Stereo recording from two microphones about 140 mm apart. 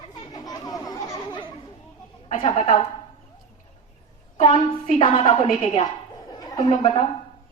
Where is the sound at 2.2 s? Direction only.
40° left (ahead or behind).